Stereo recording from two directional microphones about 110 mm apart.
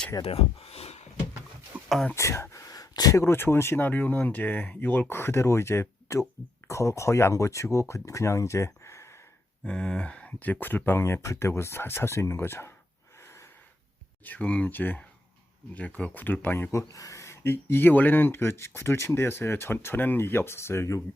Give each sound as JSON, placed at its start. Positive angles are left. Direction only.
{"t": 0.2, "sound": "speech", "side_deg": 65}
{"t": 1.7, "sound": "a sound", "side_deg": -15}
{"t": 2.1, "sound": "speech", "side_deg": 25}
{"t": 9.6, "sound": "speech", "side_deg": 10}
{"t": 14.3, "sound": "speech", "side_deg": 10}